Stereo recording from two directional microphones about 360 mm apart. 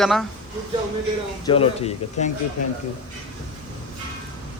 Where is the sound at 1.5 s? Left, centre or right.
Centre.